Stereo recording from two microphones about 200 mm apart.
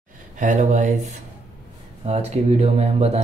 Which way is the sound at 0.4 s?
40° right (ahead or behind).